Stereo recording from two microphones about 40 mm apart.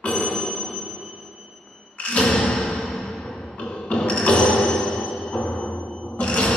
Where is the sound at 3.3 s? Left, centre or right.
Centre.